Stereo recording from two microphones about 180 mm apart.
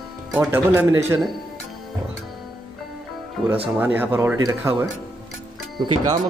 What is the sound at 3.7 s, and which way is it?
Speech, 10° right (ahead or behind).